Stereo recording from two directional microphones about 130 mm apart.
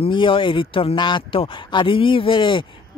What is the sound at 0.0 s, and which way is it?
Speech, 40° left (ahead or behind).